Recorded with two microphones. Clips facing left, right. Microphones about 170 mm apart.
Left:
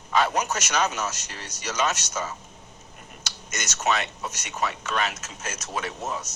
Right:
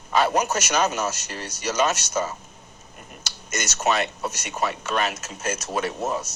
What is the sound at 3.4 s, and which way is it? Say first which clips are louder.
Speech: right 3 dB; 45° right (ahead or behind).